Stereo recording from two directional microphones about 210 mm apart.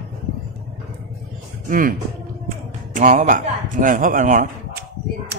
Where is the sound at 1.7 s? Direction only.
40° right (ahead or behind).